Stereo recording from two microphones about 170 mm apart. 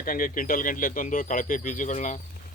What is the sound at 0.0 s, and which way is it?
Speech, 55° left (ahead or behind).